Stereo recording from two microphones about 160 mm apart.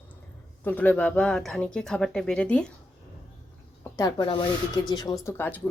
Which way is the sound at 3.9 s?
20° left (ahead or behind).